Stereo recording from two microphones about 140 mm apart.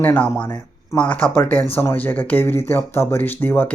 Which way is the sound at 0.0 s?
15° left (ahead or behind).